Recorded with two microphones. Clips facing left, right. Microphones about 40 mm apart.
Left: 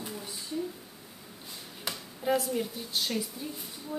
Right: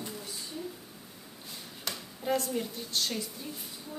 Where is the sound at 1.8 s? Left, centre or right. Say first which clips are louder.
Left 3 dB; centre.